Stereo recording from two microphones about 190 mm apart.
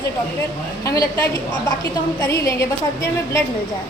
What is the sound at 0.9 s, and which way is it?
Speech, 15° left (ahead or behind).